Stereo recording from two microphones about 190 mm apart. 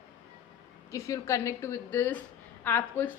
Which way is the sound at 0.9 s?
15° left (ahead or behind).